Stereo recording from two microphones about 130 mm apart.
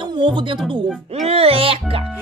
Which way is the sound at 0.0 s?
40° right (ahead or behind).